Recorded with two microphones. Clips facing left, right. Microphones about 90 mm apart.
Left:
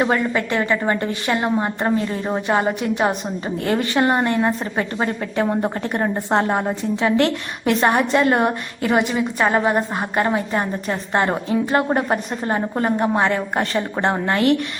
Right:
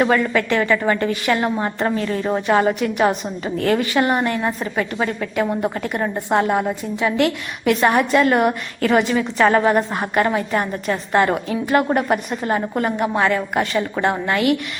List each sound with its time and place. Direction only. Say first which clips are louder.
0.0 s a woman's voice: right 2 dB; 25° left (ahead or behind)